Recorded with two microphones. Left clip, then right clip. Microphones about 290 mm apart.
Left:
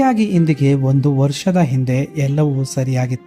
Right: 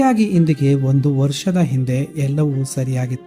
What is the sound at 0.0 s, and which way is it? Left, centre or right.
Speech, centre.